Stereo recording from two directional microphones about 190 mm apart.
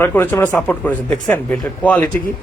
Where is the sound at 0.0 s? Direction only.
10° left (ahead or behind).